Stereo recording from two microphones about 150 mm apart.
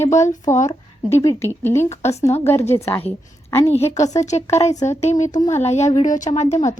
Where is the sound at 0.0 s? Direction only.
20° left (ahead or behind).